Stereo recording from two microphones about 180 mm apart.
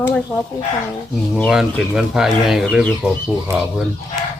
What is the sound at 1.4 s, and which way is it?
Speech, centre (ahead or behind).